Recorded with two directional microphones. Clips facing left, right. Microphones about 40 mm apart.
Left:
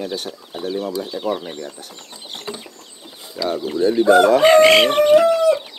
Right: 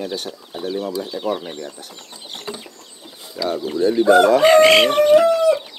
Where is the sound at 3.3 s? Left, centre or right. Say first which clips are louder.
Even; centre.